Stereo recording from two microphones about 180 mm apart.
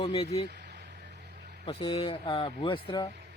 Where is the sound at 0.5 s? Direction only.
70° right (ahead or behind).